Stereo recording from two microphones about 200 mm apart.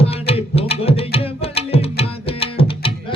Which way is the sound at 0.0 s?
30° left (ahead or behind).